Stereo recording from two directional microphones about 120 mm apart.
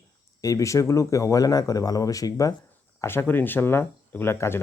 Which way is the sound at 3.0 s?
20° left (ahead or behind).